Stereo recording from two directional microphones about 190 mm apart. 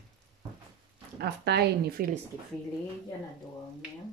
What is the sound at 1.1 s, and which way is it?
Speech, 60° right (ahead or behind).